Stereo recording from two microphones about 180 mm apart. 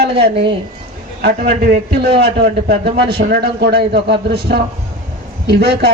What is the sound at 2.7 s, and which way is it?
A man's voice, 65° right (ahead or behind).